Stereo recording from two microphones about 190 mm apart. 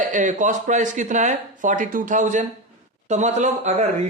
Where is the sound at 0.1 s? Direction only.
40° right (ahead or behind).